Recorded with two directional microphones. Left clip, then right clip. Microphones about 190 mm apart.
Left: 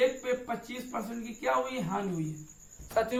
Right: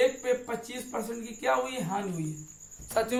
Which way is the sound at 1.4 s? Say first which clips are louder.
Right 2 dB; 30° right (ahead or behind).